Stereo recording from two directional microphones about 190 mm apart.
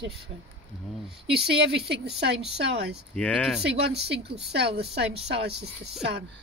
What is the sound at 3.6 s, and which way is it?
Speech, 65° right (ahead or behind).